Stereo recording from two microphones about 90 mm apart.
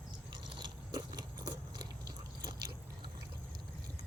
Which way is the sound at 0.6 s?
45° right (ahead or behind).